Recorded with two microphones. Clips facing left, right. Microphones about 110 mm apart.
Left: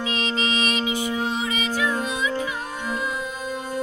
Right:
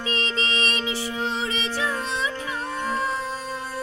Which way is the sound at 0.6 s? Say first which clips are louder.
Left 3 dB; 10° left (ahead or behind).